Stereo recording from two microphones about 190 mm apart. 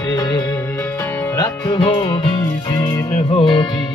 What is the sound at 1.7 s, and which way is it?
Music, 25° left (ahead or behind).